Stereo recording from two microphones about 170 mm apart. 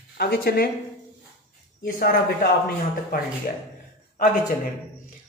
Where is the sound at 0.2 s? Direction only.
65° left (ahead or behind).